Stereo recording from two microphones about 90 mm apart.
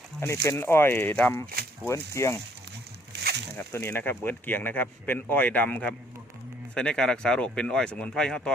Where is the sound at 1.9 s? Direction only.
35° left (ahead or behind).